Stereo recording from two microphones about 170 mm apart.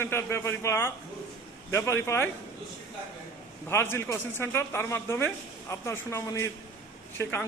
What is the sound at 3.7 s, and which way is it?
Speech, 15° left (ahead or behind).